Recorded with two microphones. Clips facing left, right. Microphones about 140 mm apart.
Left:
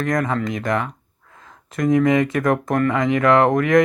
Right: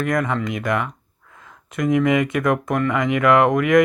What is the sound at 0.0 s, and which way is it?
Speech, 40° left (ahead or behind).